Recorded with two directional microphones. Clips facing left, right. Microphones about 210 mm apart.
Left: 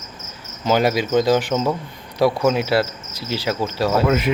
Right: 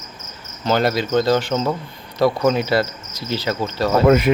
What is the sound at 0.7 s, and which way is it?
Speech, 10° left (ahead or behind).